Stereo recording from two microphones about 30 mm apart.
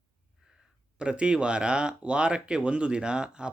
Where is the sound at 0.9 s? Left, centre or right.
Right.